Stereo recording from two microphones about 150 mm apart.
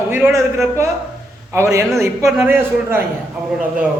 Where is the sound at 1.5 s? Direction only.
20° right (ahead or behind).